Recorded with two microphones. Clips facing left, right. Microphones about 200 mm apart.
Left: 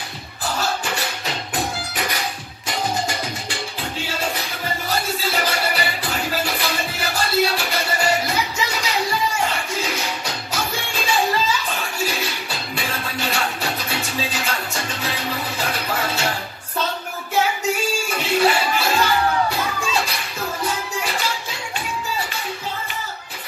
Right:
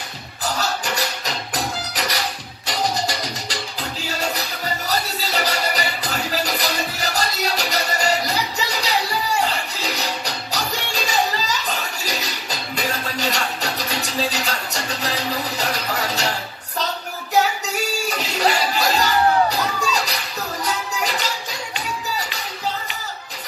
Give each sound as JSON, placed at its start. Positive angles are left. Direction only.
{"t": 0.5, "sound": "music", "side_deg": -40}
{"t": 17.3, "sound": "a sound", "side_deg": -40}
{"t": 20.6, "sound": "music", "side_deg": -40}